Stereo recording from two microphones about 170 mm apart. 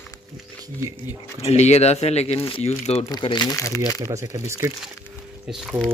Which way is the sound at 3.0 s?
25° left (ahead or behind).